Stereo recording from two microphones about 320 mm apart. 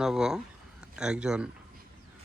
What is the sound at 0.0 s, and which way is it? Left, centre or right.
Speech, centre.